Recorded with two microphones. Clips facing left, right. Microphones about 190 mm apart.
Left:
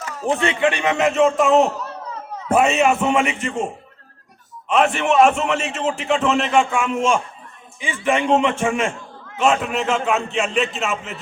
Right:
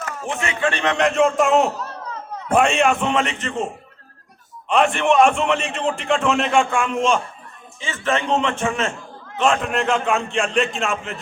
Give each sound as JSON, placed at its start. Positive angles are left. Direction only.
{"t": 0.3, "sound": "a man's voice", "side_deg": 30}
{"t": 0.6, "sound": "a man's voice", "side_deg": 15}
{"t": 4.7, "sound": "a man's voice", "side_deg": 5}